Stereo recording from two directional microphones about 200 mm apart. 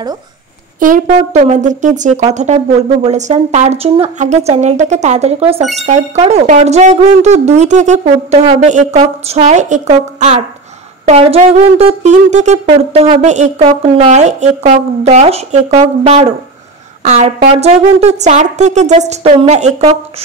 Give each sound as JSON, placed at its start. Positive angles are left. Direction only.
{"t": 0.7, "sound": "speech", "side_deg": -40}
{"t": 17.0, "sound": "a woman's voice", "side_deg": -35}